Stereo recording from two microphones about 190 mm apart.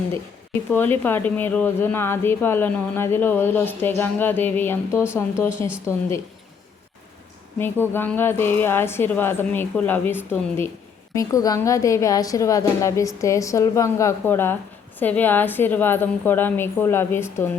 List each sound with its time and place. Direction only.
0.7 s a woman's voice: 10° left (ahead or behind)
5.6 s speech: 25° right (ahead or behind)
7.6 s a woman's voice: 10° left (ahead or behind)